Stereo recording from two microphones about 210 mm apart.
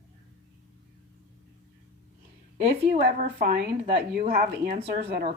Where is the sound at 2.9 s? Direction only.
50° right (ahead or behind).